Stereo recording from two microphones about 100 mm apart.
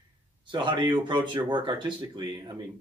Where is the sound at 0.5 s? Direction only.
50° right (ahead or behind).